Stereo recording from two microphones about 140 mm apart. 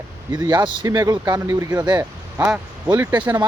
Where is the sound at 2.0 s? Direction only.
15° right (ahead or behind).